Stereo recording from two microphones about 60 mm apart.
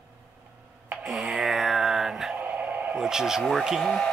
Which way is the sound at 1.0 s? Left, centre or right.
Centre.